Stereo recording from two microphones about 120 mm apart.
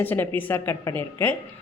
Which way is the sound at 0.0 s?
15° left (ahead or behind).